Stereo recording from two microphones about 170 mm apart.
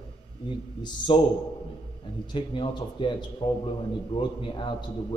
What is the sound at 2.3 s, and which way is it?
A man's voice, 30° left (ahead or behind).